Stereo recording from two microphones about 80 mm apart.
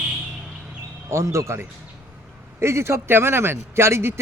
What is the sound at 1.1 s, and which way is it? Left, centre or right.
Speech, right.